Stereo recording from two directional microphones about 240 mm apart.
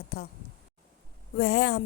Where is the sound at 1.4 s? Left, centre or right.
Left.